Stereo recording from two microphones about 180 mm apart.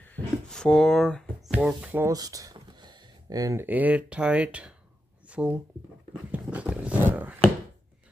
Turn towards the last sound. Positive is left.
turn(degrees=-10)  # may be behind; listen again after turning